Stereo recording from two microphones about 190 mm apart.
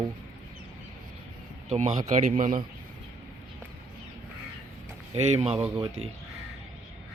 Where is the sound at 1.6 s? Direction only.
40° right (ahead or behind).